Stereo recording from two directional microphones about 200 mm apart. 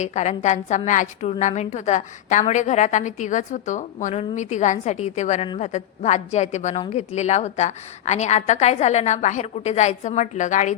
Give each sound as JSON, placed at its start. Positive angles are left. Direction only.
{"t": 0.0, "sound": "a woman's voice", "side_deg": 35}